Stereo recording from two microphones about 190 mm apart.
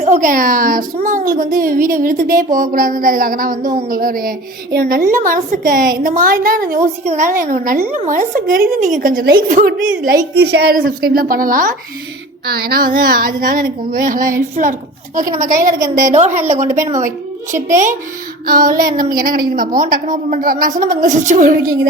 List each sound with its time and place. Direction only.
0.0 s a woman's voice: 40° right (ahead or behind)
15.5 s a woman's voice: 15° right (ahead or behind)
16.0 s a woman's voice: 40° right (ahead or behind)
17.5 s a woman's voice: 40° right (ahead or behind)